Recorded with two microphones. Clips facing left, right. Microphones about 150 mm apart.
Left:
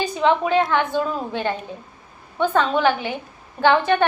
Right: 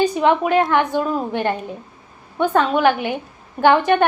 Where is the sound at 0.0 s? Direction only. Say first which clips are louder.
Right 3 dB; 15° right (ahead or behind).